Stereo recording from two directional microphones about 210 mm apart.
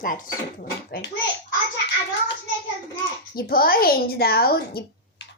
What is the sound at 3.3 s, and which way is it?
A woman's voice, 45° left (ahead or behind).